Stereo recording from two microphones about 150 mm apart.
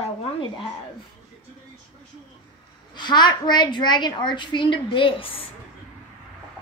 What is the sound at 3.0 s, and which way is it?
A woman's voice, 30° left (ahead or behind).